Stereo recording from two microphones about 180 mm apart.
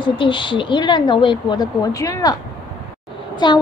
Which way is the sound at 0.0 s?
25° left (ahead or behind).